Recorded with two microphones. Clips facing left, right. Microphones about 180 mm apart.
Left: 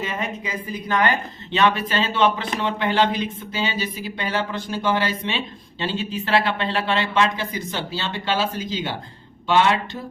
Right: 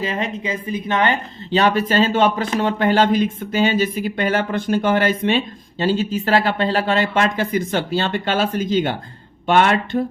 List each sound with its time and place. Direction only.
0.0 s a woman's voice: 30° right (ahead or behind); by 10.0 s 55° right (ahead or behind)